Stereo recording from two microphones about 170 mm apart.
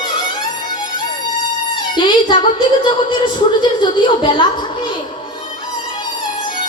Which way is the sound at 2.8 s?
30° left (ahead or behind).